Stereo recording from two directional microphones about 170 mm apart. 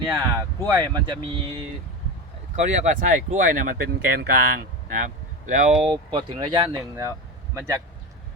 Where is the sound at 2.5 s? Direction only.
45° right (ahead or behind); by 5.0 s 60° right (ahead or behind).